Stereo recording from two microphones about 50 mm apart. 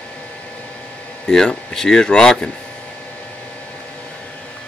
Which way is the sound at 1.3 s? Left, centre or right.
Centre.